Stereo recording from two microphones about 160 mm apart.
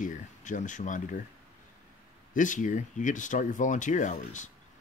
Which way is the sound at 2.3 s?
55° left (ahead or behind).